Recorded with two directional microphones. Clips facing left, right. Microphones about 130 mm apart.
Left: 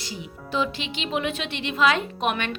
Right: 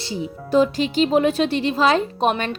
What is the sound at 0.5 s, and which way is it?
A woman's voice, 40° right (ahead or behind).